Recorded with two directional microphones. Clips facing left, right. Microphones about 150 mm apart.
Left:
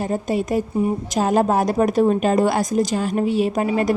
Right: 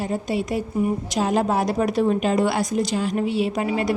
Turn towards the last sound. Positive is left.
turn(degrees=45)  # may be behind; listen again after turning